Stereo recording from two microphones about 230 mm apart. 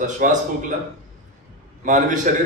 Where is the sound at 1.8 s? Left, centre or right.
Right.